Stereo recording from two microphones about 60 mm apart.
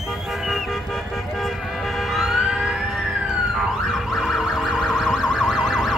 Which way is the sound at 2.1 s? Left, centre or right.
Centre.